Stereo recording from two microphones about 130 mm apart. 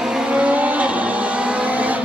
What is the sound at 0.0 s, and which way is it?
Vehicle, 5° right (ahead or behind).